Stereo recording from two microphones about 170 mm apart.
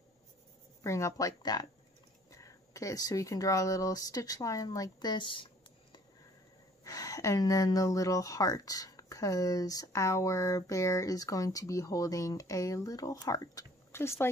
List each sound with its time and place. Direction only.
0.8 s speech: 15° left (ahead or behind)